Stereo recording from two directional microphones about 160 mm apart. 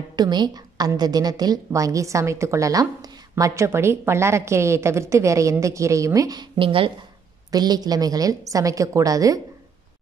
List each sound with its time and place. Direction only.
0.1 s a woman's voice: 25° right (ahead or behind)